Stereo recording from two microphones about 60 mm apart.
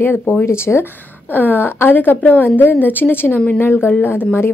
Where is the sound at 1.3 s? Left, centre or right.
Left.